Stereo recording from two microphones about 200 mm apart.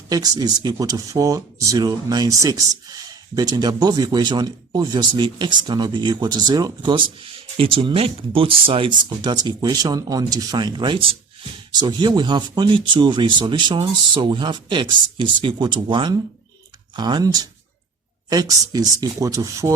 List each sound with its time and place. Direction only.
0.1 s speech: 20° right (ahead or behind)